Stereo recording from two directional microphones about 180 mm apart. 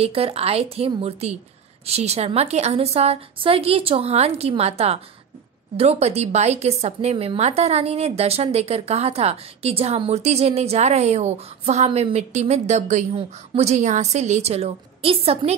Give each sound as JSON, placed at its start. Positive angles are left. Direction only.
{"t": 0.0, "sound": "a woman's voice", "side_deg": -35}